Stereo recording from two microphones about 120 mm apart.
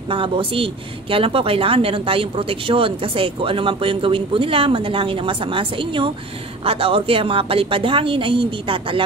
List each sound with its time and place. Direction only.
0.1 s speech: 50° right (ahead or behind)